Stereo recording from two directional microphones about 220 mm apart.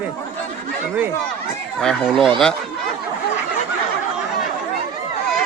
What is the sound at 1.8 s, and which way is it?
Speech, centre (ahead or behind).